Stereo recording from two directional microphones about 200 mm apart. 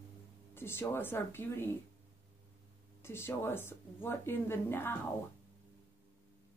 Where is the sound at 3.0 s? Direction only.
10° left (ahead or behind).